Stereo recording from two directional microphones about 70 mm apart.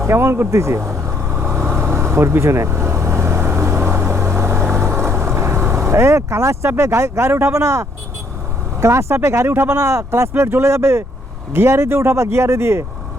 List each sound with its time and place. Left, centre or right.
0.0 s vehicle: right
8.8 s speech: right
9.7 s speech: right